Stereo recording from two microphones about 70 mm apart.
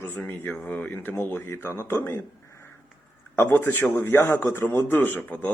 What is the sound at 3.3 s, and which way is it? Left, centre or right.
Speech, left.